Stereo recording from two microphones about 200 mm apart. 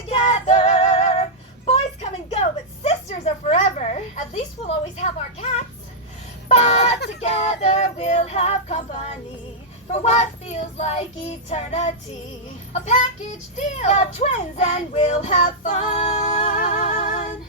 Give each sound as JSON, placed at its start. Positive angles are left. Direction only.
{"t": 0.1, "sound": "female singing", "side_deg": 35}
{"t": 2.8, "sound": "a sound", "side_deg": 35}
{"t": 4.9, "sound": "child singing", "side_deg": 30}
{"t": 6.5, "sound": "speech", "side_deg": 30}
{"t": 7.2, "sound": "child singing", "side_deg": 35}